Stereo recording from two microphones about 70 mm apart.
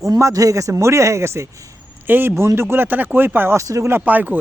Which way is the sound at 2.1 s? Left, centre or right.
Right.